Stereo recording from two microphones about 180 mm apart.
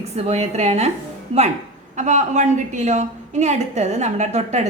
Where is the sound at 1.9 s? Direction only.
40° right (ahead or behind).